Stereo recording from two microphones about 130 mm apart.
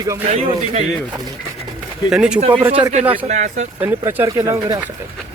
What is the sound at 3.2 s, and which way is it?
Speech, 65° right (ahead or behind).